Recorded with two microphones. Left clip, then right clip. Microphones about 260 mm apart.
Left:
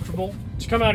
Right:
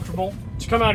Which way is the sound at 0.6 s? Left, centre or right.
Centre.